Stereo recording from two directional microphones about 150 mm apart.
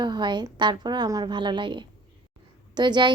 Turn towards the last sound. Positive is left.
turn(degrees=-30)  # may be behind; listen again after turning